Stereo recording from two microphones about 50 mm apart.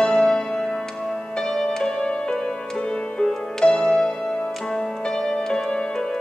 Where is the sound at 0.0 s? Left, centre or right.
Centre.